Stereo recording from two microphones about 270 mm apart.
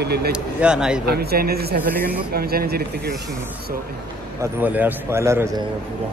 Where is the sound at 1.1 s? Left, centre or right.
Right.